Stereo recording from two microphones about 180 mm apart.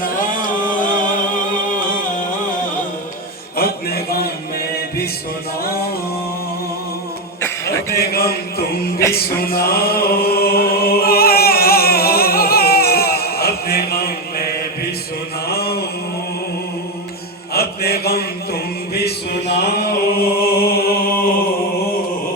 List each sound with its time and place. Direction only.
0.0 s music: 50° left (ahead or behind)
3.6 s a sound: 60° left (ahead or behind)
7.4 s a sound: 15° left (ahead or behind)
7.9 s music: 60° left (ahead or behind)
15.4 s mantra: 60° left (ahead or behind)
17.5 s mantra: 60° left (ahead or behind)
20.4 s music: 55° left (ahead or behind)